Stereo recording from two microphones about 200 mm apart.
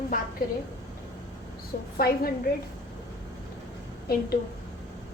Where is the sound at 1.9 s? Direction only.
50° left (ahead or behind).